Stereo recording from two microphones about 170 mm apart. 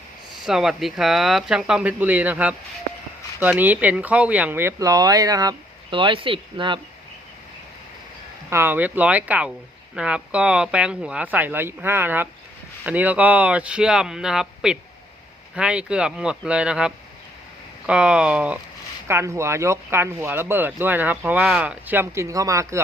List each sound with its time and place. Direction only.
0.4 s speech: 5° right (ahead or behind); by 6.7 s 30° right (ahead or behind)
8.4 s speech: 15° right (ahead or behind)